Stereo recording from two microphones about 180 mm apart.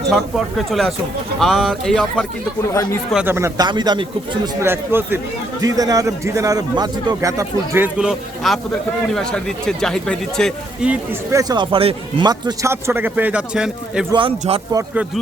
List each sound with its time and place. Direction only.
0.1 s speech: centre (ahead or behind)
3.2 s speech: 15° right (ahead or behind)
3.7 s a man's voice: 25° right (ahead or behind)
4.6 s a man's voice: 15° right (ahead or behind)
7.9 s speech: 5° right (ahead or behind)
14.1 s a man's voice: 30° right (ahead or behind)